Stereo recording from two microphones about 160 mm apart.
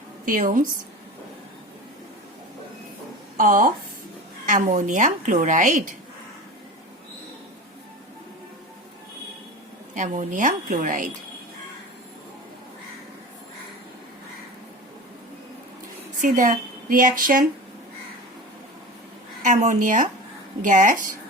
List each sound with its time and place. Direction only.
0.3 s a woman's voice: 55° right (ahead or behind)
3.3 s a woman's voice: 60° right (ahead or behind)
9.9 s a woman's voice: 50° right (ahead or behind)
16.2 s a woman's voice: 50° right (ahead or behind)
19.5 s a woman's voice: 50° right (ahead or behind)